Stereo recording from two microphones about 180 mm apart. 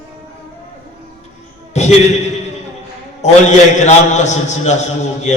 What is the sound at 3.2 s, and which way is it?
Mantra, 40° left (ahead or behind).